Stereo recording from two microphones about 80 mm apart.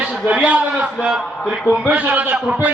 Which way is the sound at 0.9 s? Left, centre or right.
Centre.